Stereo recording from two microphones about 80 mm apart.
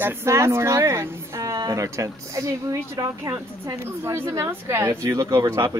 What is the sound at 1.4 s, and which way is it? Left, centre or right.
A woman's voice, right.